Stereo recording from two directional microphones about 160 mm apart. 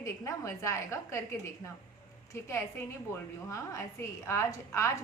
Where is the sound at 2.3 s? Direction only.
15° left (ahead or behind).